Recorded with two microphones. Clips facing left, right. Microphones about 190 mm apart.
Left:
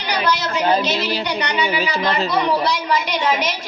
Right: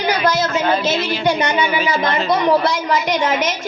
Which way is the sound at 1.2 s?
50° right (ahead or behind).